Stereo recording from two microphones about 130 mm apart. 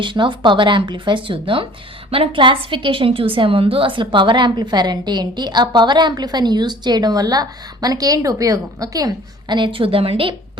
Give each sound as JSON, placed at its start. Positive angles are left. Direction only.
{"t": 0.0, "sound": "a woman's voice", "side_deg": -40}